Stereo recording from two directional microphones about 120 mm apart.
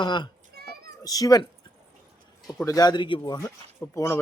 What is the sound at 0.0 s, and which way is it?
A man's voice, 40° left (ahead or behind).